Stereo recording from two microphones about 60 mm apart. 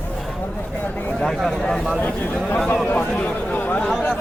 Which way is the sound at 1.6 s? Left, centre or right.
Centre.